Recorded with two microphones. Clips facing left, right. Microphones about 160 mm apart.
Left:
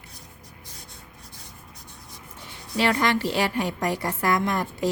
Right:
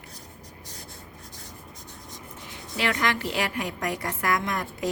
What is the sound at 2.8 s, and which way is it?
A woman's voice, 35° left (ahead or behind).